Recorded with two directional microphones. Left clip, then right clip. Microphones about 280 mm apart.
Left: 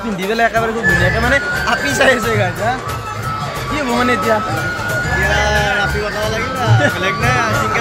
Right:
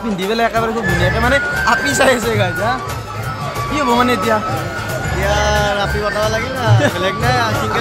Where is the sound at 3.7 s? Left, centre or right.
Centre.